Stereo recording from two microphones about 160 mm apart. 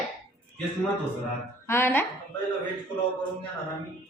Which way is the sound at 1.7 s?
15° left (ahead or behind).